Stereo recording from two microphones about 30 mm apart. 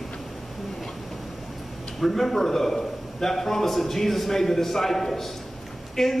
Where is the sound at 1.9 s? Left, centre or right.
Centre.